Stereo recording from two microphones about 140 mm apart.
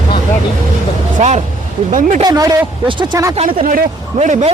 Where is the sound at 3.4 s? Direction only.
80° right.